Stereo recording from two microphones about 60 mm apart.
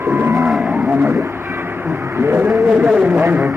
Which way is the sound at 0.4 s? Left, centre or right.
Centre.